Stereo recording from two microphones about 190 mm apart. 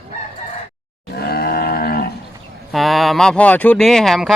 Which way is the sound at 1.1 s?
55° left (ahead or behind).